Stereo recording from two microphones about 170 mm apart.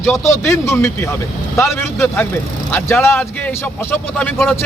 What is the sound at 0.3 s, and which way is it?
Speech, 15° left (ahead or behind).